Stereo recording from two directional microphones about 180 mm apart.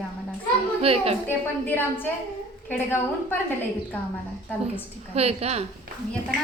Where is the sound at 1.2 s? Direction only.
10° left (ahead or behind).